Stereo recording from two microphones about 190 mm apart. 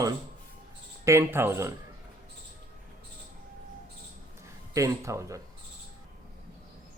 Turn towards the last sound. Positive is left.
turn(degrees=-15)  # may be behind; listen again after turning